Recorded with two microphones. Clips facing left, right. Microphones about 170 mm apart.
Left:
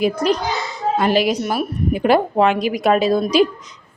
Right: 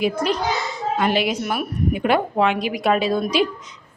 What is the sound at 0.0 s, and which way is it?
A woman's voice, 40° left (ahead or behind).